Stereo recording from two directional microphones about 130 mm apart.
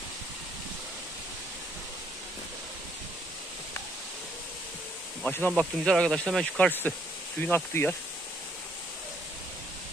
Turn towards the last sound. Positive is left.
turn(degrees=15)  # may be behind; listen again after turning